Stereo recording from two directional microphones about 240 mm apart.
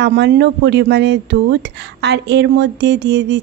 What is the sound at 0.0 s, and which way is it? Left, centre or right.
Speech, right.